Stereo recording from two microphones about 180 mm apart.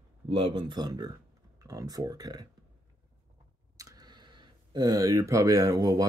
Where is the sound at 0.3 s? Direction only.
30° right (ahead or behind).